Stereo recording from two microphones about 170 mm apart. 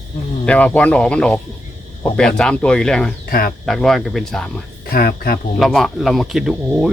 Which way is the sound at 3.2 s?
60° left (ahead or behind).